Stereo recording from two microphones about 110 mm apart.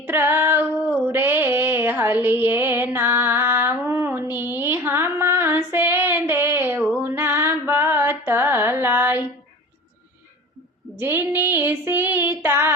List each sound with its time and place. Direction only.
0.0 s female singing: 20° right (ahead or behind)
1.0 s a sound: 20° right (ahead or behind)
7.0 s female singing: 20° right (ahead or behind)
7.7 s music: 20° right (ahead or behind)
10.9 s female singing: 20° right (ahead or behind)